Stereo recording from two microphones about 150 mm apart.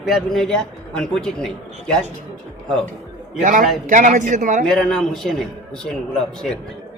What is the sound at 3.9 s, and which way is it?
Speech, 55° right (ahead or behind).